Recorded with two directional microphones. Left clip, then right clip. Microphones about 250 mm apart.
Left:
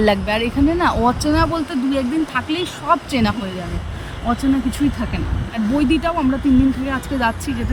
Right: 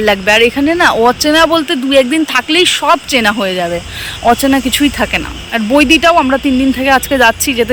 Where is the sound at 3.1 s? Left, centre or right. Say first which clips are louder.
Right 10 dB; centre.